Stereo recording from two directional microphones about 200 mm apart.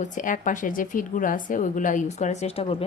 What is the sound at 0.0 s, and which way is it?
Speech, 40° left (ahead or behind).